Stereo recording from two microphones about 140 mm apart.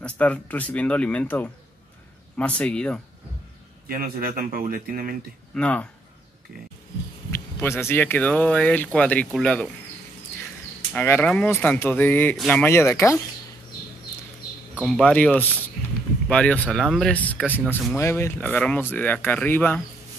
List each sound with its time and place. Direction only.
0.0 s speech: 10° left (ahead or behind)
3.9 s speech: 90° right
5.5 s speech: 10° left (ahead or behind)
7.2 s speech: 20° left (ahead or behind)
10.9 s speech: 10° left (ahead or behind)
14.8 s speech: 5° left (ahead or behind)